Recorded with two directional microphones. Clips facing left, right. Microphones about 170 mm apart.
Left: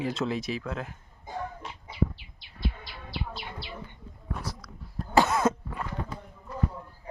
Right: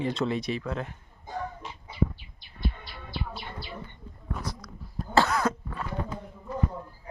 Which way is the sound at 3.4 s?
10° left (ahead or behind).